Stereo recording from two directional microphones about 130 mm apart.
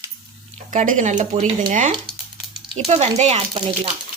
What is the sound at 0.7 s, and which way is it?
Speech, 75° right (ahead or behind).